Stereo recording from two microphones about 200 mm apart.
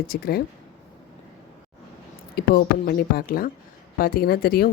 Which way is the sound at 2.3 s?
50° left (ahead or behind).